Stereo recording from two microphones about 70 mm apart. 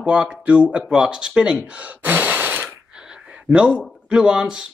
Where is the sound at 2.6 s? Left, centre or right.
Centre.